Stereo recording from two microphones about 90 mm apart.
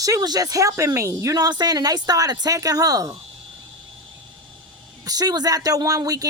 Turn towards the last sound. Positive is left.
turn(degrees=-40)  # may be behind; listen again after turning